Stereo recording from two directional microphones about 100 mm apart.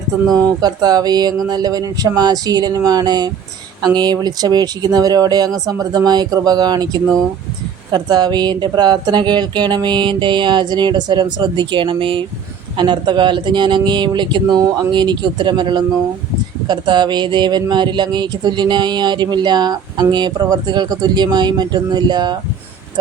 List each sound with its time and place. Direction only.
0.6 s speech: 40° right (ahead or behind); by 12.2 s 60° right (ahead or behind)
12.7 s speech: 50° right (ahead or behind)